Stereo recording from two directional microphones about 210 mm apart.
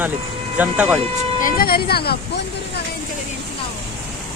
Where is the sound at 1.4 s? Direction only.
40° left (ahead or behind).